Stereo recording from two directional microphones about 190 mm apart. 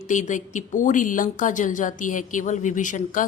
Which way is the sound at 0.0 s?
40° left (ahead or behind).